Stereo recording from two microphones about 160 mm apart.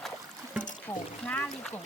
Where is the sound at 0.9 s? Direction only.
10° left (ahead or behind).